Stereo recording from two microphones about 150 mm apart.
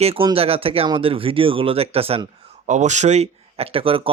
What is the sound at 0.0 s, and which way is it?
Speech, 40° right (ahead or behind).